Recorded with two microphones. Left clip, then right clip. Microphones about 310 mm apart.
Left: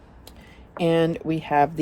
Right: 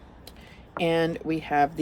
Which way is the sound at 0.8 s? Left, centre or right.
Centre.